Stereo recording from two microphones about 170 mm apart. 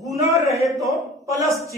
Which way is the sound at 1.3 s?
20° right (ahead or behind).